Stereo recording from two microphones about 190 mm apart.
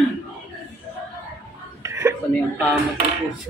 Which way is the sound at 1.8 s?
15° right (ahead or behind).